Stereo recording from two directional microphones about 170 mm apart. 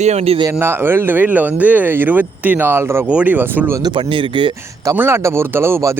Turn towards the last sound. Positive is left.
turn(degrees=-15)  # may be behind; listen again after turning